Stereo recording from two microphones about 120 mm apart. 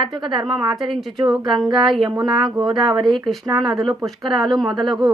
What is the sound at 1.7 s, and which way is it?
Speech, 40° right (ahead or behind).